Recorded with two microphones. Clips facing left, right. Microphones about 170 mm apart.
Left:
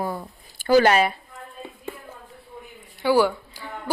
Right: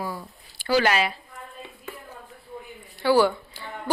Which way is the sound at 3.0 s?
15° left (ahead or behind).